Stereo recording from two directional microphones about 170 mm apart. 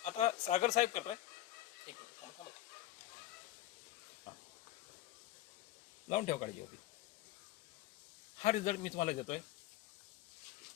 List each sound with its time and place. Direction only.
0.0 s speech: 40° left (ahead or behind)
6.1 s speech: 40° left (ahead or behind)
8.4 s a man's voice: 45° left (ahead or behind)